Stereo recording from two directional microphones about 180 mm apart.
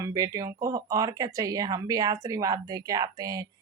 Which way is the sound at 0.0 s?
20° right (ahead or behind).